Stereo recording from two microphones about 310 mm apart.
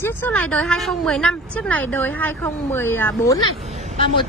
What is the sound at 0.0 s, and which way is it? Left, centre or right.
Speech, centre.